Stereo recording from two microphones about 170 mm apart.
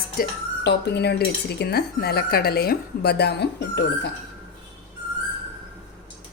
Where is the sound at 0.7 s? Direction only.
80° left.